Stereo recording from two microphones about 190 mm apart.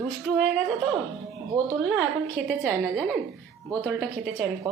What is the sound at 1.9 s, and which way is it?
A woman's voice, centre (ahead or behind).